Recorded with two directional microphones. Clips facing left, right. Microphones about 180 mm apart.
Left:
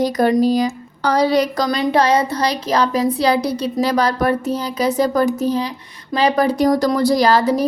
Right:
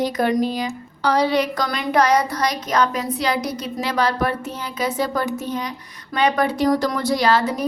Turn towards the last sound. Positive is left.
turn(degrees=35)  # may be behind; listen again after turning